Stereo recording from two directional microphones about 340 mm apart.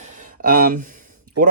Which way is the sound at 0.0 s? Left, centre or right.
Right.